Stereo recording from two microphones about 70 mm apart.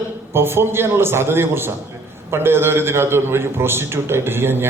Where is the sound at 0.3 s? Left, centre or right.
Right.